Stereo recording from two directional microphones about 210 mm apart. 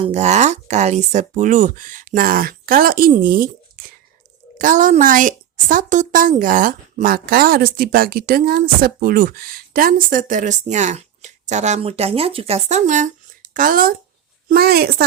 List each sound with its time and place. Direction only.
0.0 s a woman's voice: 35° right (ahead or behind)